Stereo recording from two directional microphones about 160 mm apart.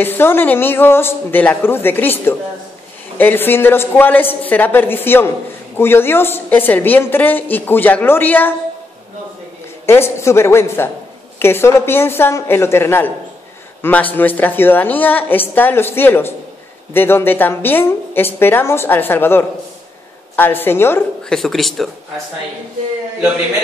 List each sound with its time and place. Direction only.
0.0 s a woman's voice: 15° left (ahead or behind)
9.8 s a woman's voice: 15° left (ahead or behind)